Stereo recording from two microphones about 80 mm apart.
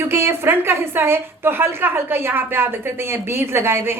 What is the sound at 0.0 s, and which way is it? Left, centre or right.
A woman's voice, right.